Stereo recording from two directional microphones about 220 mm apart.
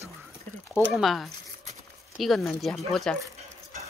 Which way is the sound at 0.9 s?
Centre (ahead or behind).